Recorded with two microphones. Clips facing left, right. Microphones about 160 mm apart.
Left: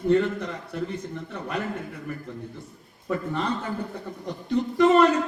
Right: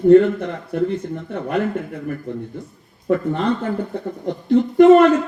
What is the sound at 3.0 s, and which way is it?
Speech, 55° right (ahead or behind).